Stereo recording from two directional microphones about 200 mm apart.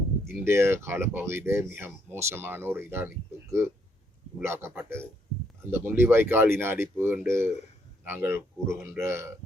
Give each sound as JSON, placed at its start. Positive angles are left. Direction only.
{"t": 0.3, "sound": "speech", "side_deg": -10}
{"t": 4.4, "sound": "speech", "side_deg": -10}